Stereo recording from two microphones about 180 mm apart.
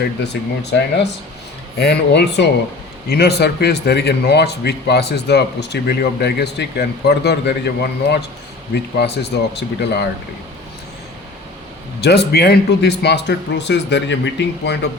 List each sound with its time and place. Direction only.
0.6 s a man's voice: 70° left (ahead or behind)
11.9 s speech: 65° left (ahead or behind)